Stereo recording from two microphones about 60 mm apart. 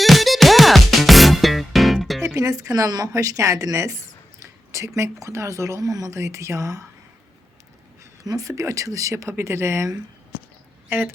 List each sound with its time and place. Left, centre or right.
0.0 s music: centre
2.2 s speech: right
8.2 s speech: right
9.4 s speech: right
10.8 s speech: right